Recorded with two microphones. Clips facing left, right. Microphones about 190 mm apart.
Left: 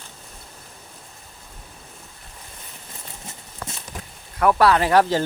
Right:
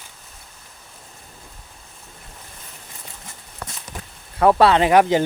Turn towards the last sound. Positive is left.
turn(degrees=-15)  # may be behind; listen again after turning